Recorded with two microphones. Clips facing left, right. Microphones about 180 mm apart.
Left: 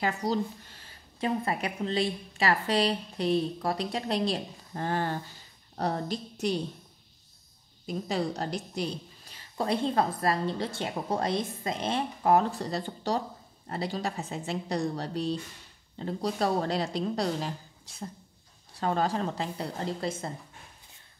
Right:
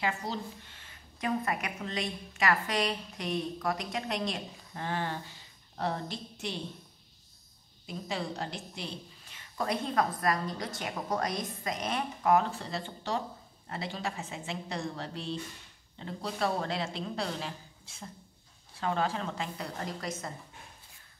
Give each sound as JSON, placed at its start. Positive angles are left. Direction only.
{"t": 0.0, "sound": "a woman's voice", "side_deg": 40}
{"t": 7.8, "sound": "a woman's voice", "side_deg": 40}